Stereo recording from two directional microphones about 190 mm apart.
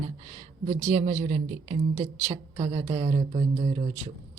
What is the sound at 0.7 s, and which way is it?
A woman's voice, 35° right (ahead or behind).